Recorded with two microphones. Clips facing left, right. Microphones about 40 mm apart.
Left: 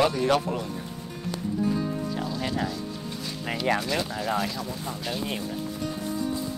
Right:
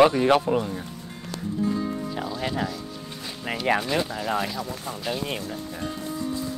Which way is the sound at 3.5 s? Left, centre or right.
Centre.